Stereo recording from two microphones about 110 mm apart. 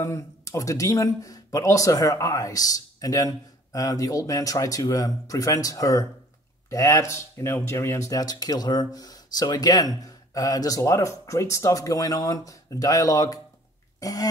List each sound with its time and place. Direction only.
0.0 s speech: 30° left (ahead or behind)
13.9 s cough: 35° left (ahead or behind)